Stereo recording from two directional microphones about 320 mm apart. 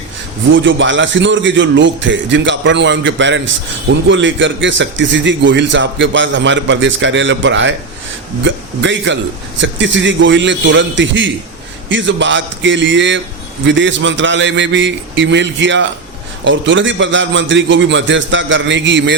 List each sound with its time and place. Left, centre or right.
0.5 s a man's voice: right